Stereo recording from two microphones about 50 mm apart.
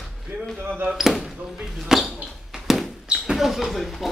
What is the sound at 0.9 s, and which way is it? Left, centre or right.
Speech, centre.